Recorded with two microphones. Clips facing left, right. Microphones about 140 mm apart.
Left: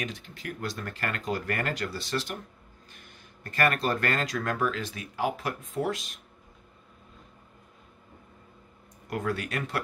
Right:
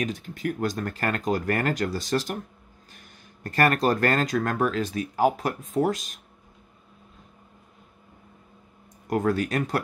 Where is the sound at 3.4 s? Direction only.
40° right (ahead or behind).